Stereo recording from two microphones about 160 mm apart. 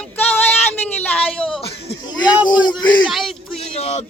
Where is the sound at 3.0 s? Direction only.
Centre (ahead or behind).